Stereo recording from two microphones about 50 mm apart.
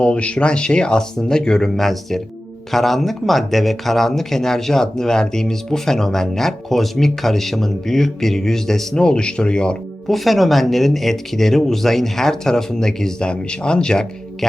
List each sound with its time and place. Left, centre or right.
0.0 s speech: left
10.1 s speech: centre